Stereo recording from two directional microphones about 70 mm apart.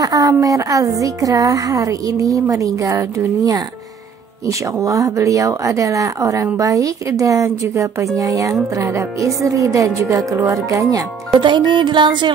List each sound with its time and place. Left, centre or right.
0.0 s a woman's voice: right
4.7 s a woman's voice: right
11.3 s music: right